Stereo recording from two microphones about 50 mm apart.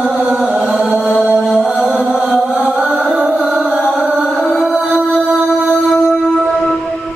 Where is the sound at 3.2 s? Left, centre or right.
Centre.